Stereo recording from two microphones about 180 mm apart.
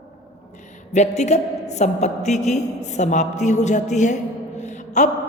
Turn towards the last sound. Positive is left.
turn(degrees=40)  # may be behind; listen again after turning